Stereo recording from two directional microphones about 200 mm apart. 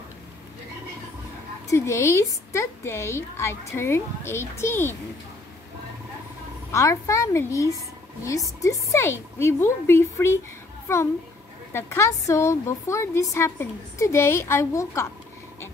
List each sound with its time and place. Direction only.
1.7 s a woman's voice: 15° left (ahead or behind)
6.7 s a woman's voice: 15° left (ahead or behind)